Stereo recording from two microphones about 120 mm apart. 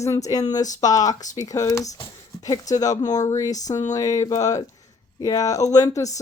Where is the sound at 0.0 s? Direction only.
25° left (ahead or behind).